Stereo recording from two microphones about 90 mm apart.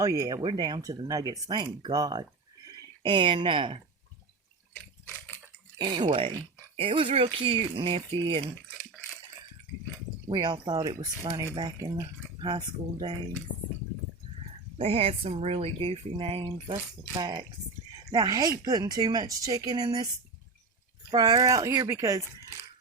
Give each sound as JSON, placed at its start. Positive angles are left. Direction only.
{"t": 0.0, "sound": "speech", "side_deg": -35}
{"t": 0.4, "sound": "speech", "side_deg": -60}
{"t": 1.0, "sound": "speech", "side_deg": -40}
{"t": 3.1, "sound": "speech", "side_deg": -65}
{"t": 5.7, "sound": "speech", "side_deg": -55}
{"t": 6.7, "sound": "speech", "side_deg": -85}
{"t": 10.2, "sound": "speech", "side_deg": -55}
{"t": 10.8, "sound": "speech", "side_deg": -45}
{"t": 14.8, "sound": "speech", "side_deg": -90}
{"t": 16.5, "sound": "speech", "side_deg": -75}
{"t": 21.1, "sound": "speech", "side_deg": -50}